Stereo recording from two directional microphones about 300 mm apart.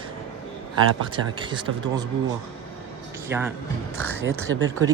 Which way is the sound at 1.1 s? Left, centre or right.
Centre.